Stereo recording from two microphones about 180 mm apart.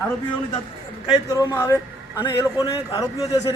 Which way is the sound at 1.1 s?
20° left (ahead or behind).